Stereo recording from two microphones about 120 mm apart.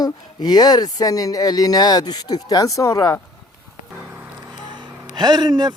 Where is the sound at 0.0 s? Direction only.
35° left (ahead or behind).